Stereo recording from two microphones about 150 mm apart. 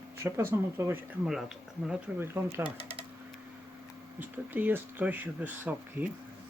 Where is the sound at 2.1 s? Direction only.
10° right (ahead or behind).